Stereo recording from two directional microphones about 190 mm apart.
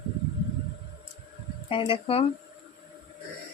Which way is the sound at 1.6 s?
30° left (ahead or behind).